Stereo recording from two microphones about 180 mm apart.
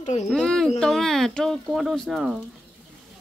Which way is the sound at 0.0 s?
40° left (ahead or behind).